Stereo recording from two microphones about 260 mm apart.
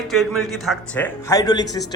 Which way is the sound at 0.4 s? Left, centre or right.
Centre.